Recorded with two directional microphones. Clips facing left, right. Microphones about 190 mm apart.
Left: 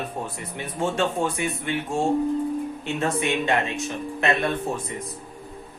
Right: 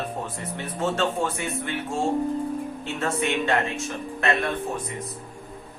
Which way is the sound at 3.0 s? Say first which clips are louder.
Left 1 dB; 15° left (ahead or behind).